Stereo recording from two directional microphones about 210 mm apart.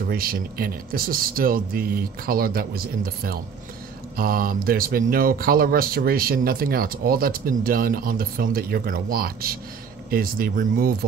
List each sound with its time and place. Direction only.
0.1 s speech: 45° right (ahead or behind)